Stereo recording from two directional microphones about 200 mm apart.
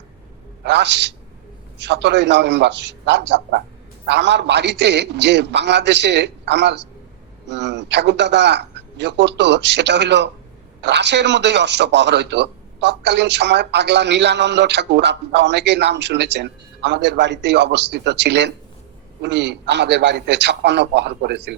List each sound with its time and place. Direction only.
0.6 s a man's voice: 60° right (ahead or behind)